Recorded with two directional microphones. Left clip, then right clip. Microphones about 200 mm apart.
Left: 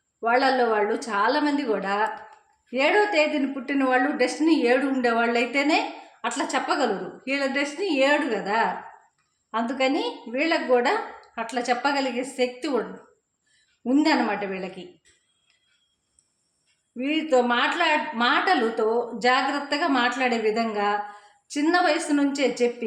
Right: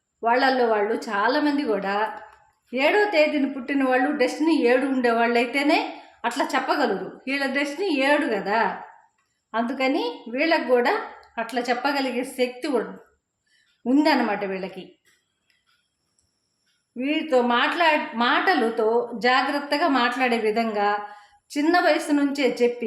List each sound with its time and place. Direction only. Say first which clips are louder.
0.2 s a woman's voice: right 1 dB; 10° right (ahead or behind)
13.8 s a woman's voice: right 1 dB; 10° right (ahead or behind)
16.9 s a woman's voice: even; 10° right (ahead or behind)